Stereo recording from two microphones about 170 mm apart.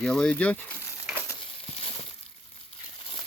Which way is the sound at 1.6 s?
35° left (ahead or behind).